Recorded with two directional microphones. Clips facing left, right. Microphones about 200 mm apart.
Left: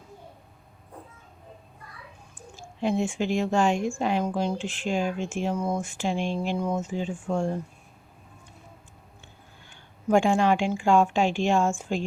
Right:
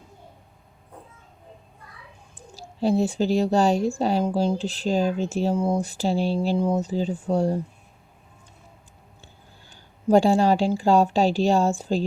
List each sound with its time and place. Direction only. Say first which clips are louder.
2.6 s speech: right 4 dB; 35° right (ahead or behind)
9.2 s speech: right 1 dB; 35° right (ahead or behind)